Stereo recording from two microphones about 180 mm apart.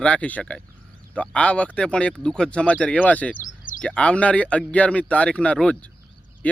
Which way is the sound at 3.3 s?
50° left (ahead or behind).